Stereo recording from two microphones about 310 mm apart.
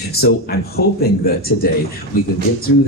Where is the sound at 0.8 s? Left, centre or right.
Left.